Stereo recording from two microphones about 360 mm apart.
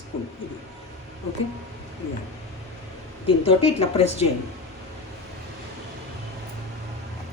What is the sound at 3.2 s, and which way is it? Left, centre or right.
A woman's voice, centre.